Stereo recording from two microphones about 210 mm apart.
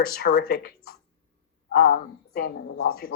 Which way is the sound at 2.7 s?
80° left.